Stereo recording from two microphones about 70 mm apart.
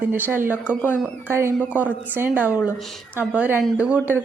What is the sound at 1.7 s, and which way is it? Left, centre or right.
Speech, right.